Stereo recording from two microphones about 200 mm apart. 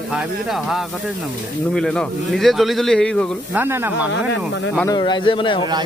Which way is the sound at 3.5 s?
10° right (ahead or behind).